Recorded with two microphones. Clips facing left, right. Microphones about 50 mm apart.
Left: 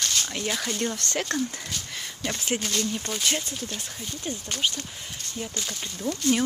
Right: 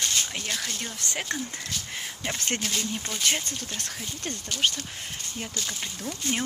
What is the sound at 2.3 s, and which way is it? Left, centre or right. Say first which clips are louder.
Speech: left 3 dB; right.